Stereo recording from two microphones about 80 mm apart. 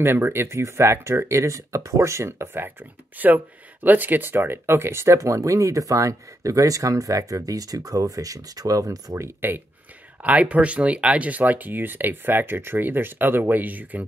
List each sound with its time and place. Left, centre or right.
0.0 s speech: right
10.2 s speech: centre